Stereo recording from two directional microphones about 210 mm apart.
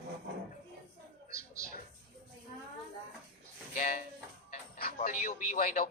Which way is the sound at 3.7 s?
40° left (ahead or behind).